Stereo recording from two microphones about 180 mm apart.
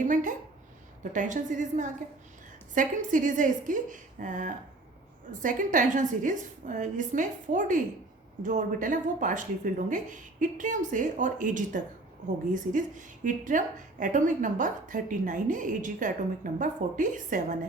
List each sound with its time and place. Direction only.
0.0 s a woman's voice: 45° right (ahead or behind)